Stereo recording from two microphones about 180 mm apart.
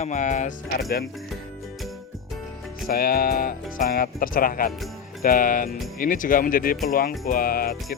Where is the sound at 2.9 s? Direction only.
55° left (ahead or behind).